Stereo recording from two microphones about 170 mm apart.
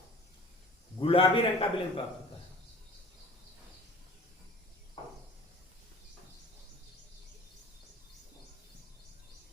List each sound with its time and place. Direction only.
0.9 s a man's voice: 30° left (ahead or behind)